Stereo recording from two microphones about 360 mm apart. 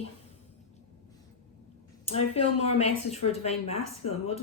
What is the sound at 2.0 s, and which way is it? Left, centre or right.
A woman's voice, centre.